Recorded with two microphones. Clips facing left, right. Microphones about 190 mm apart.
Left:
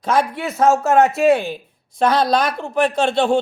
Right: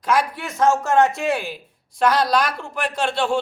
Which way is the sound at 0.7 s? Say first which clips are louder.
Left 3 dB; 40° left (ahead or behind).